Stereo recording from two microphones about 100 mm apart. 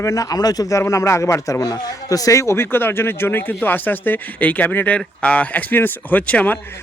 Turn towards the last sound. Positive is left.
turn(degrees=15)  # may be behind; listen again after turning